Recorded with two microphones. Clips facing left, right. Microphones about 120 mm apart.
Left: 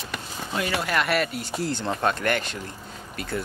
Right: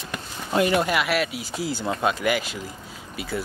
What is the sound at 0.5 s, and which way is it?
Speech, 25° right (ahead or behind).